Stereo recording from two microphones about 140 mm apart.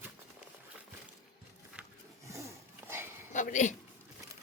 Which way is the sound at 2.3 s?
20° right (ahead or behind).